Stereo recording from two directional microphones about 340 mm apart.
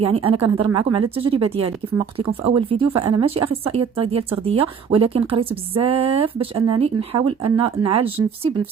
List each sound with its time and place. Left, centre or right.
0.0 s speech: centre